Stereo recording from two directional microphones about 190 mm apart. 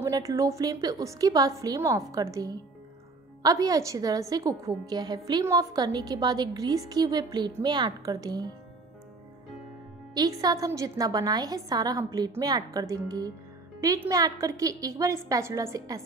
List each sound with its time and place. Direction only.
0.0 s a woman's voice: 20° right (ahead or behind)
10.1 s a woman's voice: 20° right (ahead or behind)